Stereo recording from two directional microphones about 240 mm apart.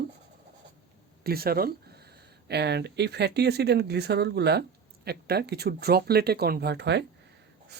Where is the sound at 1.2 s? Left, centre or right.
Right.